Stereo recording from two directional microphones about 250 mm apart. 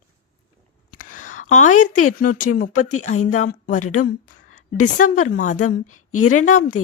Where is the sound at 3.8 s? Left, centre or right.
Left.